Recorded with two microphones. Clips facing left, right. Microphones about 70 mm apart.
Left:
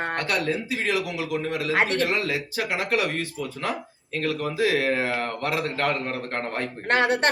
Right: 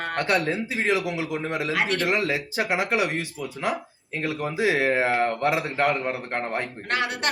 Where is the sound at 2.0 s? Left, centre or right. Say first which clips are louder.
Right 1 dB; right.